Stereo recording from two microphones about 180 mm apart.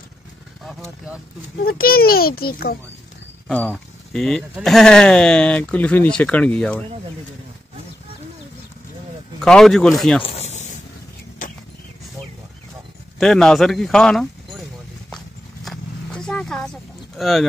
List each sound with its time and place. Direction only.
0.7 s speech: centre (ahead or behind)
1.6 s a child's voice: 55° left (ahead or behind)
3.4 s speech: 5° left (ahead or behind)
9.4 s speech: centre (ahead or behind)
10.2 s snake: 35° left (ahead or behind)
13.2 s speech: 5° left (ahead or behind)
15.0 s horse: centre (ahead or behind)
17.2 s speech: centre (ahead or behind)